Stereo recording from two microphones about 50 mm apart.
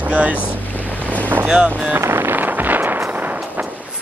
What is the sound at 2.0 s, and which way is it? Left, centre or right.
Music, right.